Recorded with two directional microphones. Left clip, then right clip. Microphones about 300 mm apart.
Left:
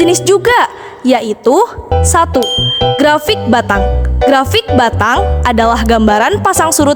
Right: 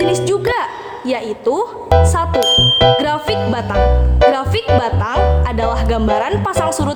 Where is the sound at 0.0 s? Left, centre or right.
Left.